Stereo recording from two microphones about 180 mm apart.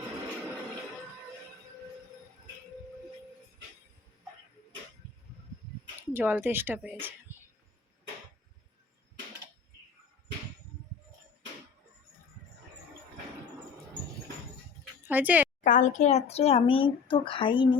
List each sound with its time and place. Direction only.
6.0 s speech: 10° right (ahead or behind)
15.0 s a sound: 10° right (ahead or behind)
15.6 s speech: 45° left (ahead or behind)